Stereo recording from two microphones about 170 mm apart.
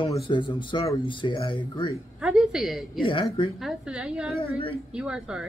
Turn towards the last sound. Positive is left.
turn(degrees=-5)  # may be behind; listen again after turning